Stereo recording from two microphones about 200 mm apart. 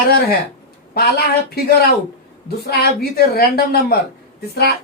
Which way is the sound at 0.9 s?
50° left (ahead or behind).